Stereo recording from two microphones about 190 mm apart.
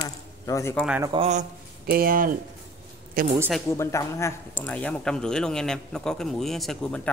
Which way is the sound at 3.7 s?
15° left (ahead or behind).